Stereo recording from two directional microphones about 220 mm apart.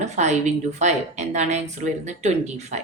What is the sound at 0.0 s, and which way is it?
A woman's voice, 30° right (ahead or behind).